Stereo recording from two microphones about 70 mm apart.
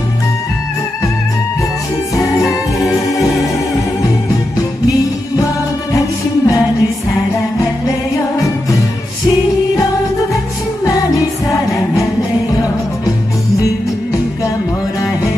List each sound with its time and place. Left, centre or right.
5.9 s music: left